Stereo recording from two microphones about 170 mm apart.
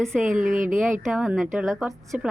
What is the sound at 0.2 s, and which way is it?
Speech, 50° right (ahead or behind).